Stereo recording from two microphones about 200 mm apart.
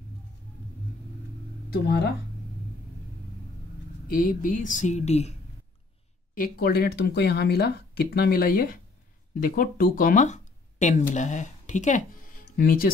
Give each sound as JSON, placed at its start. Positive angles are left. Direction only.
{"t": 1.7, "sound": "speech", "side_deg": 55}
{"t": 4.1, "sound": "speech", "side_deg": 45}
{"t": 6.3, "sound": "speech", "side_deg": 45}